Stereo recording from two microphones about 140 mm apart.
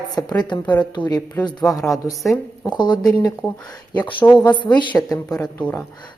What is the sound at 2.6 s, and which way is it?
Speech, 30° left (ahead or behind).